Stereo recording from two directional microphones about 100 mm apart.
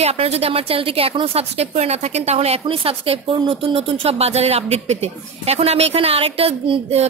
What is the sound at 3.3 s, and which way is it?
Speech, 60° right (ahead or behind).